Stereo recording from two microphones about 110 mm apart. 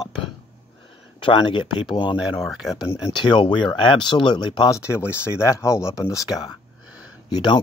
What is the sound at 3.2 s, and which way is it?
Speech, 45° left (ahead or behind).